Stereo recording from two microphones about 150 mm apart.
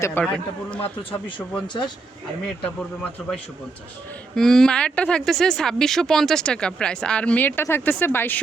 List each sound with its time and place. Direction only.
0.0 s a man's voice: 15° left (ahead or behind)
1.6 s speech: 30° left (ahead or behind)
3.2 s speech: 5° left (ahead or behind)
4.4 s speech: 5° left (ahead or behind)